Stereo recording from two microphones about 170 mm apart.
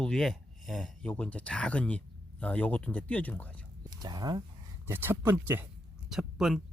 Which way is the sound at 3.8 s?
25° right (ahead or behind).